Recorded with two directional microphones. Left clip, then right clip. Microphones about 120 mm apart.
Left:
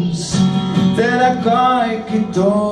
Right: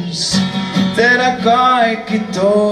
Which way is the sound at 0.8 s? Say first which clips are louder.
Right 3 dB; 5° right (ahead or behind).